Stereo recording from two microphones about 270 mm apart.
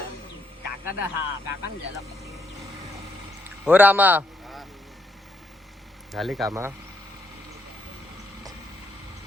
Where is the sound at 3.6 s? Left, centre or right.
Centre.